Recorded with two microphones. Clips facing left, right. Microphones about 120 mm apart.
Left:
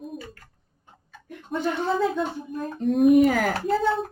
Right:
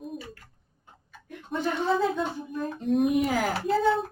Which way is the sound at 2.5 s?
40° left (ahead or behind).